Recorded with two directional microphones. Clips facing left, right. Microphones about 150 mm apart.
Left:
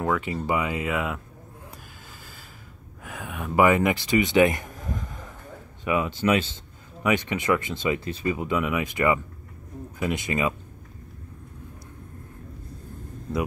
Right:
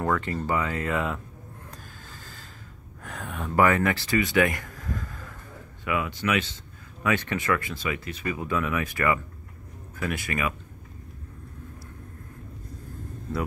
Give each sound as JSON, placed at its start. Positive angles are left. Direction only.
{"t": 0.0, "sound": "speech", "side_deg": 10}
{"t": 3.0, "sound": "speech", "side_deg": 5}
{"t": 7.0, "sound": "speech", "side_deg": 15}